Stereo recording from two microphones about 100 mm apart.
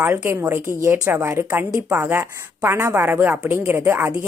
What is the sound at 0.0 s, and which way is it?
A woman's voice, 15° right (ahead or behind).